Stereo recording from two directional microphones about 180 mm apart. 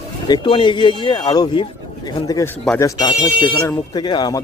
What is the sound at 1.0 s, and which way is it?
Speech, 25° left (ahead or behind).